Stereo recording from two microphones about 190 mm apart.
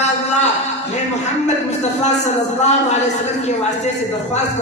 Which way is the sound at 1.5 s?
35° left (ahead or behind).